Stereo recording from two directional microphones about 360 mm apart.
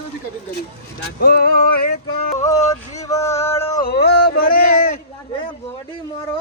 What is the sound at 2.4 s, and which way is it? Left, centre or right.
Music, centre.